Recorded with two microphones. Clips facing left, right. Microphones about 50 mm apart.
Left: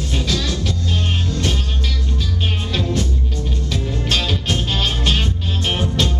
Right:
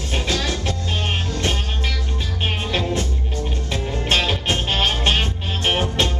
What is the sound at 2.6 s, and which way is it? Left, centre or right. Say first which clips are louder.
Music: left 2 dB; right.